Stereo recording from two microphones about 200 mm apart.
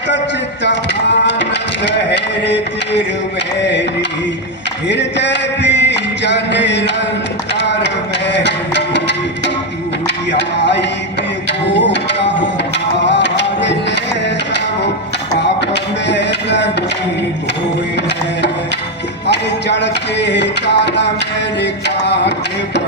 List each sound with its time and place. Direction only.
1.3 s music: 60° left (ahead or behind)
4.9 s a sound: 60° left (ahead or behind)
8.3 s music: 60° left (ahead or behind)
13.1 s music: 60° left (ahead or behind)
15.7 s music: 60° left (ahead or behind)
19.3 s a sound: 60° left (ahead or behind)